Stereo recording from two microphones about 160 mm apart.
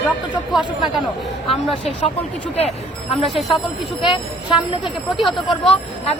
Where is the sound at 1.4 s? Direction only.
35° left (ahead or behind).